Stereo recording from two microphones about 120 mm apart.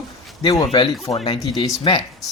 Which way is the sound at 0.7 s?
45° left (ahead or behind).